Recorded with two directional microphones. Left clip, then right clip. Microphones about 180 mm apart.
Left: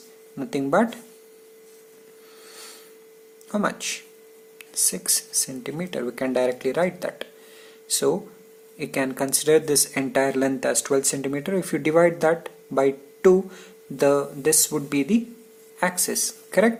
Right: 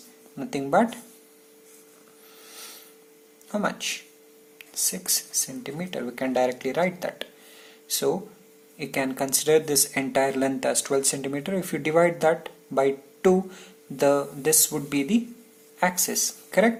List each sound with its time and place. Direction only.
0.3 s speech: 25° left (ahead or behind)
3.5 s speech: 30° left (ahead or behind)